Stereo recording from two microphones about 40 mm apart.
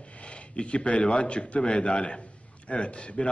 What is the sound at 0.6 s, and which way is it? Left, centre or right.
A man's voice, left.